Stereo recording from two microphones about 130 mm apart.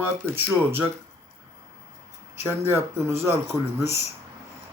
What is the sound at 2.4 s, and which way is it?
Speech, 20° right (ahead or behind).